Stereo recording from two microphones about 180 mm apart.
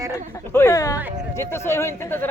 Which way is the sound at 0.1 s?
15° left (ahead or behind).